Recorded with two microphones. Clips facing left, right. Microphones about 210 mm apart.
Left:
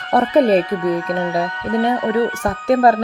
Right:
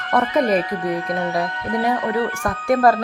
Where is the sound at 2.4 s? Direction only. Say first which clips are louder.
Right 1 dB; 20° left (ahead or behind).